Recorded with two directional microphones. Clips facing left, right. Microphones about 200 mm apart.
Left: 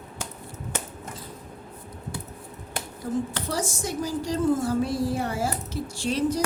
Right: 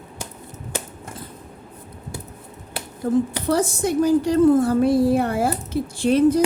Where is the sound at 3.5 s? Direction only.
60° right (ahead or behind).